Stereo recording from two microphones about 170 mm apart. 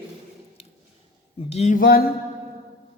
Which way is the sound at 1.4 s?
40° left (ahead or behind).